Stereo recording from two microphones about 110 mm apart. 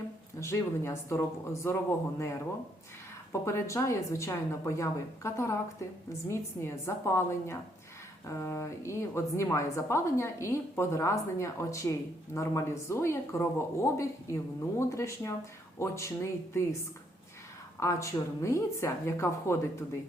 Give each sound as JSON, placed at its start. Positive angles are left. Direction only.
{"t": 0.3, "sound": "speech", "side_deg": 25}
{"t": 3.4, "sound": "speech", "side_deg": 25}
{"t": 17.7, "sound": "speech", "side_deg": 25}